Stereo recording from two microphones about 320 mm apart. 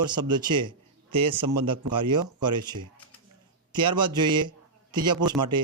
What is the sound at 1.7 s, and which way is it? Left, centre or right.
Mantra, centre.